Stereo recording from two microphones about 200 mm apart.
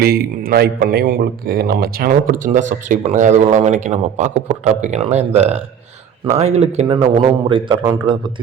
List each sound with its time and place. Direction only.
0.0 s a man's voice: 50° right (ahead or behind); by 8.3 s 25° right (ahead or behind)